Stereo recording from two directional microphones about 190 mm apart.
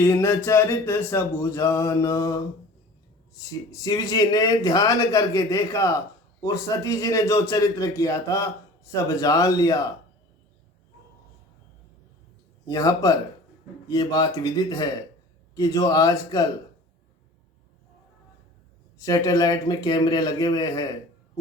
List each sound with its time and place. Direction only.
0.0 s speech: 15° left (ahead or behind)
12.6 s speech: 20° left (ahead or behind)
18.9 s speech: 20° left (ahead or behind)